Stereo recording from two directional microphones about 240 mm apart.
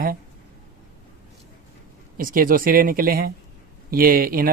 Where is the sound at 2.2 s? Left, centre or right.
Right.